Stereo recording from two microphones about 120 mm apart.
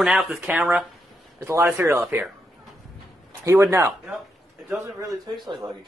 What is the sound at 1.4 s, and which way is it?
Speech, 25° right (ahead or behind).